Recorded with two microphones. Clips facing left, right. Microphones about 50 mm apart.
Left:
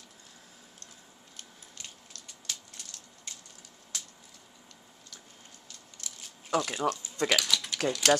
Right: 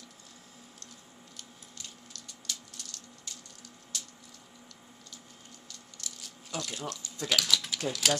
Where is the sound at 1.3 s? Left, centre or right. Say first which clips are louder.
Left 2 dB; left.